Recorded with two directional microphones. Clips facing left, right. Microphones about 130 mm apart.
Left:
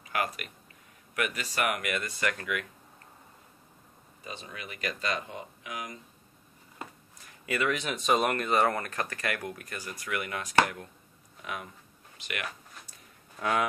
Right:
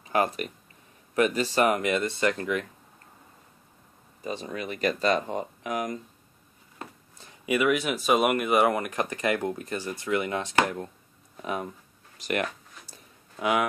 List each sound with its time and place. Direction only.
0.0 s speech: 30° right (ahead or behind)
4.2 s speech: 40° right (ahead or behind)
7.2 s speech: 20° right (ahead or behind)
12.2 s a sound: 40° right (ahead or behind)
13.4 s speech: 10° right (ahead or behind)